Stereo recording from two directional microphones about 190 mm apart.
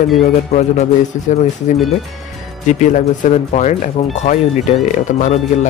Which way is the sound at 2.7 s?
40° left (ahead or behind).